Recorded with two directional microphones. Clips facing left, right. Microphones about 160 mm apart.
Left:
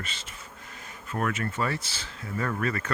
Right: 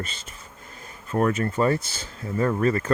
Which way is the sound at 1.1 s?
35° right (ahead or behind).